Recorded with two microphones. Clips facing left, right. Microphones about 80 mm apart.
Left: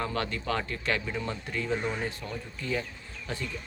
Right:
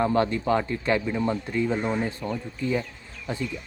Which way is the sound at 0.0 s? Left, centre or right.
Right.